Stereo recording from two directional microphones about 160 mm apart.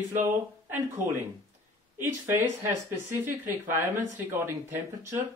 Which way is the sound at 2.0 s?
15° right (ahead or behind).